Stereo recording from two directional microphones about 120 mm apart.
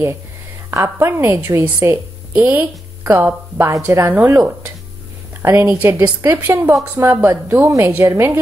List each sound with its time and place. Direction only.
0.7 s a woman's voice: 20° right (ahead or behind)